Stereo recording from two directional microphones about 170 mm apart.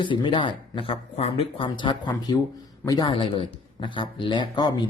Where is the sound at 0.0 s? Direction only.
30° left (ahead or behind).